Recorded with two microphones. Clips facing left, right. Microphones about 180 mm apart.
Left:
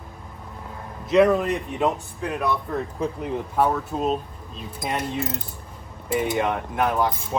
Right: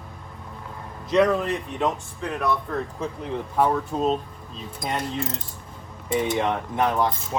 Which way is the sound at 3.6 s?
5° left (ahead or behind).